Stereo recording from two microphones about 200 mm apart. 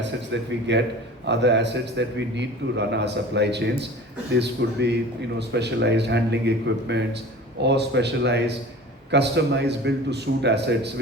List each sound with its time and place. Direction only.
0.7 s a man's voice: 60° right (ahead or behind)